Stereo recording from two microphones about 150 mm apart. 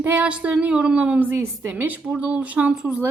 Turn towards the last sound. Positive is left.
turn(degrees=-10)  # may be behind; listen again after turning